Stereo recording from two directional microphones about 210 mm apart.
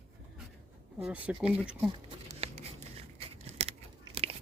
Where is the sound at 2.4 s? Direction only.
30° right (ahead or behind).